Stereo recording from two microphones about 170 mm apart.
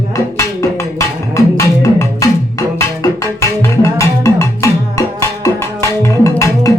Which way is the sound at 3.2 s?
15° left (ahead or behind).